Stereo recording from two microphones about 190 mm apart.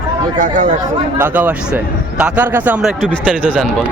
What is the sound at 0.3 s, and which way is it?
Speech, 40° right (ahead or behind).